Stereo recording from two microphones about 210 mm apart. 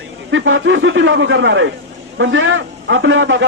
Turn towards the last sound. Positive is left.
turn(degrees=-65)  # may be behind; listen again after turning